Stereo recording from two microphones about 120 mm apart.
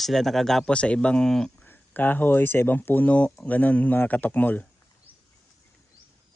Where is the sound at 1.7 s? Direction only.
15° left (ahead or behind).